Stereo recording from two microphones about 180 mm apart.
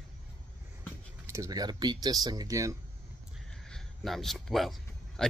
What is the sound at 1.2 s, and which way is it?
Speech, 15° right (ahead or behind).